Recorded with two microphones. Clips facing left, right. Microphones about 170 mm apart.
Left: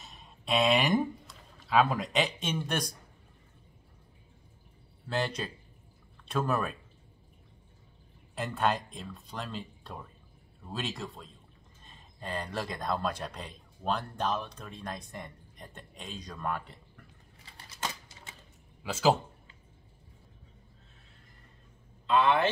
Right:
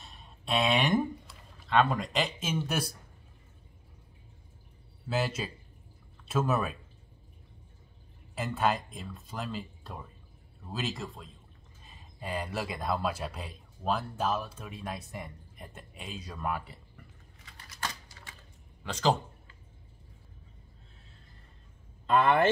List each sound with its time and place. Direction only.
0.0 s speech: centre (ahead or behind)
5.0 s speech: 5° right (ahead or behind)
8.4 s speech: centre (ahead or behind)
17.5 s typewriter: 25° left (ahead or behind)
18.8 s speech: 5° left (ahead or behind)
22.0 s speech: 50° right (ahead or behind)